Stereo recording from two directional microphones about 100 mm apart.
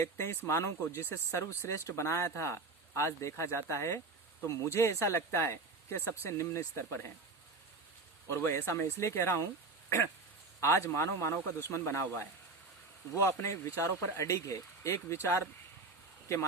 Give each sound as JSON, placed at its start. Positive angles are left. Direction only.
{"t": 0.0, "sound": "speech", "side_deg": 25}
{"t": 8.3, "sound": "speech", "side_deg": 25}
{"t": 10.6, "sound": "speech", "side_deg": 30}